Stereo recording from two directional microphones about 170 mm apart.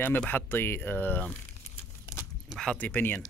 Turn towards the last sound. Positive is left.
turn(degrees=10)  # may be behind; listen again after turning